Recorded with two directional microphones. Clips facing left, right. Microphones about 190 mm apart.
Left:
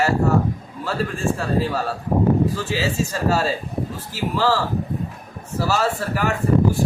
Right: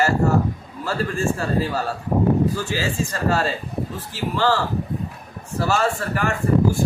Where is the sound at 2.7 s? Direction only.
5° left (ahead or behind).